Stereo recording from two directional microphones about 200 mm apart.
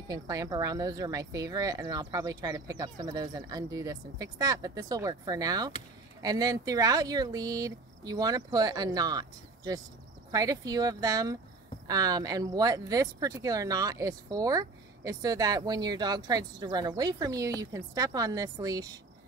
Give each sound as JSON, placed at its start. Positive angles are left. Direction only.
{"t": 0.1, "sound": "speech", "side_deg": -15}